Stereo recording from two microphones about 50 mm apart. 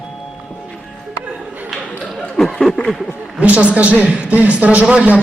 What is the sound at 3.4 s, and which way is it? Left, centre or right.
A man's voice, right.